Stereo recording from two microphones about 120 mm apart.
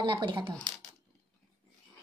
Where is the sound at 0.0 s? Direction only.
45° right (ahead or behind).